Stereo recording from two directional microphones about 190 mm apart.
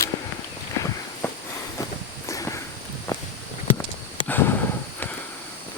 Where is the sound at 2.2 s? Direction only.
15° left (ahead or behind).